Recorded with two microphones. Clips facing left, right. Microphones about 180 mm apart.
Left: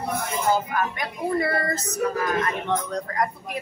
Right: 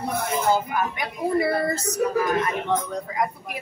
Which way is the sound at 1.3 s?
10° right (ahead or behind).